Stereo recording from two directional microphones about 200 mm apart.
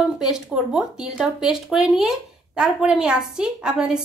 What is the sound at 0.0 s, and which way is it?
A woman's voice, 5° right (ahead or behind).